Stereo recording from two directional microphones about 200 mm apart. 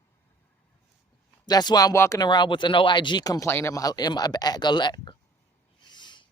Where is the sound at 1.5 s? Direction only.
20° left (ahead or behind).